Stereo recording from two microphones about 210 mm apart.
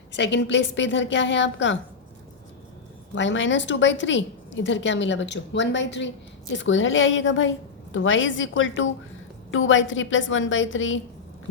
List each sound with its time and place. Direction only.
0.1 s a woman's voice: 55° left (ahead or behind)
3.2 s a woman's voice: 60° left (ahead or behind)